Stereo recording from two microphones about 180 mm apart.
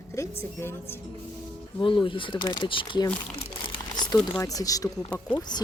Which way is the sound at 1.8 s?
30° left (ahead or behind).